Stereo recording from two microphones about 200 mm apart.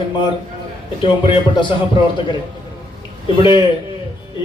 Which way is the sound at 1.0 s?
25° left (ahead or behind).